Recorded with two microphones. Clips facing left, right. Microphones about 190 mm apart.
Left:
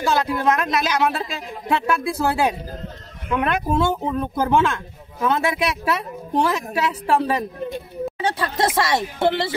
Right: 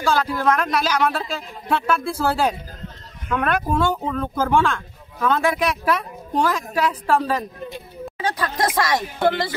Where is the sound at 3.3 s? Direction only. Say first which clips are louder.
Even; 20° left (ahead or behind).